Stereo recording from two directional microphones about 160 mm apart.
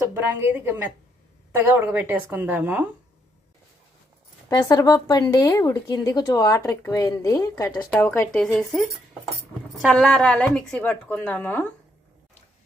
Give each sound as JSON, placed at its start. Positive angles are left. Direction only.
{"t": 0.1, "sound": "a woman's voice", "side_deg": -15}
{"t": 4.4, "sound": "a woman's voice", "side_deg": 25}
{"t": 8.3, "sound": "speech", "side_deg": 5}
{"t": 9.8, "sound": "a woman's voice", "side_deg": 0}